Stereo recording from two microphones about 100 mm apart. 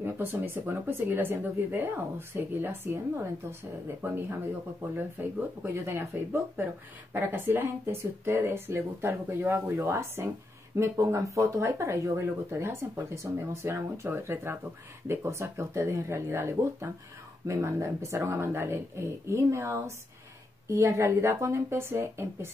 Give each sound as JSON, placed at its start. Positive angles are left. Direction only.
{"t": 0.0, "sound": "speech", "side_deg": -20}
{"t": 7.2, "sound": "speech", "side_deg": -20}